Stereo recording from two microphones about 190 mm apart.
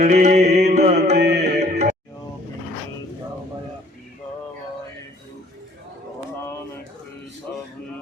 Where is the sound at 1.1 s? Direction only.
60° right (ahead or behind).